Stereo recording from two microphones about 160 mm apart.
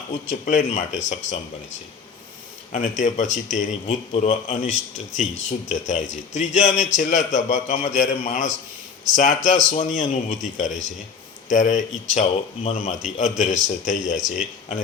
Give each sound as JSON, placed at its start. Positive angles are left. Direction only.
{"t": 0.1, "sound": "speech", "side_deg": 50}
{"t": 2.7, "sound": "speech", "side_deg": 50}